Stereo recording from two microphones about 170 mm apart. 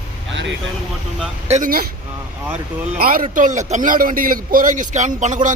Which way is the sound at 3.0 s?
55° right (ahead or behind).